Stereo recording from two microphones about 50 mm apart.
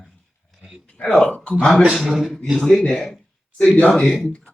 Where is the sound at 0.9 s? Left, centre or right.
Centre.